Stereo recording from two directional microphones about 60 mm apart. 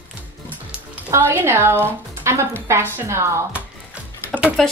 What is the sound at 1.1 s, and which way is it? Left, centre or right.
Speech, right.